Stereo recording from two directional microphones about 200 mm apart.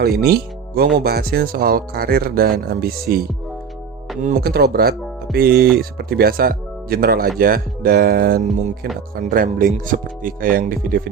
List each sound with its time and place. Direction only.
0.2 s speech: 50° right (ahead or behind)
4.2 s speech: 45° right (ahead or behind)